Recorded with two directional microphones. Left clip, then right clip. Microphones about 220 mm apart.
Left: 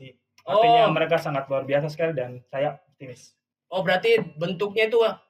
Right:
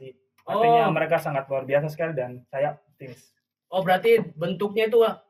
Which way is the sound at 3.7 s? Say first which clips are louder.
Right 1 dB; 35° left (ahead or behind).